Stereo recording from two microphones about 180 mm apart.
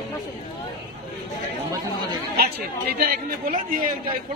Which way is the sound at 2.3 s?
60° right (ahead or behind).